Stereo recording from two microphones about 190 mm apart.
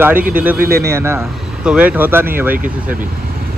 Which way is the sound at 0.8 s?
15° right (ahead or behind).